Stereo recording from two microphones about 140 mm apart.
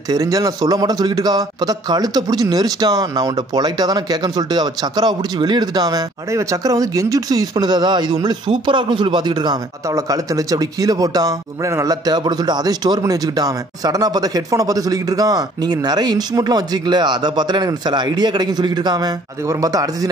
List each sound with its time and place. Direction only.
0.1 s speech: 25° right (ahead or behind)